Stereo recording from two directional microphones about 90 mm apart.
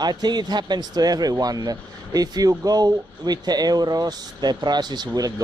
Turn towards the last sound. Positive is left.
turn(degrees=-50)  # may be behind; listen again after turning